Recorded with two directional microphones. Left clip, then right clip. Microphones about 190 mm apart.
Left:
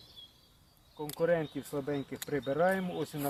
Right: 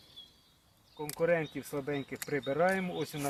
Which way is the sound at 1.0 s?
15° right (ahead or behind).